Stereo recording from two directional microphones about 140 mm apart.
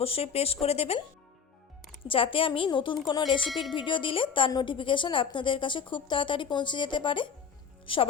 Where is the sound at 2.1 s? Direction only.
40° left (ahead or behind).